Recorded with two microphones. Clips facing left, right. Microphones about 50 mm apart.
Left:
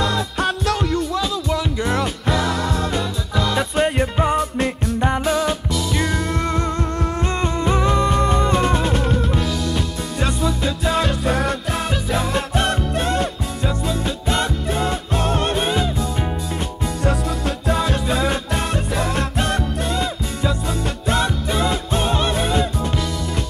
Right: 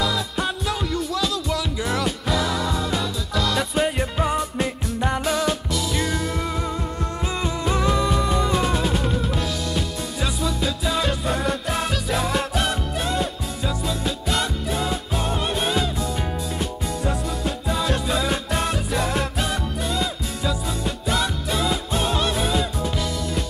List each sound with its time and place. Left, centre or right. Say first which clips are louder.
0.4 s music: left 7 dB; left
1.1 s music: left 3 dB; centre
2.4 s music: left 2 dB; centre
7.6 s music: left 3 dB; centre
14.3 s music: left 4 dB; centre
18.0 s music: left 3 dB; centre
21.1 s music: left 4 dB; centre